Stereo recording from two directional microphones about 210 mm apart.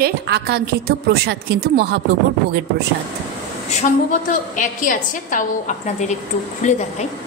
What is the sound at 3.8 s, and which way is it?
A woman's voice, 35° left (ahead or behind).